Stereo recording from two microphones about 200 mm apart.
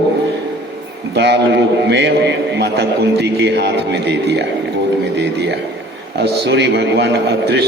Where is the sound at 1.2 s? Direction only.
60° right (ahead or behind).